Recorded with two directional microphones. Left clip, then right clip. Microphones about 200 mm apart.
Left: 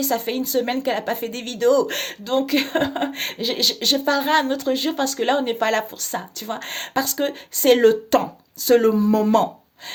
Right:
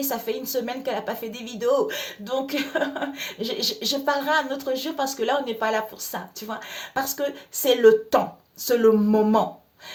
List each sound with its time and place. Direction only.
0.0 s a woman's voice: 35° left (ahead or behind)